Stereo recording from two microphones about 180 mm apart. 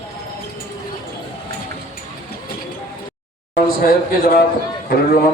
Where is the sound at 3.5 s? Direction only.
55° left (ahead or behind).